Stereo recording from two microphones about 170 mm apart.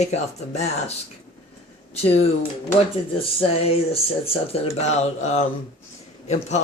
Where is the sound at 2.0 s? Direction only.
35° left (ahead or behind).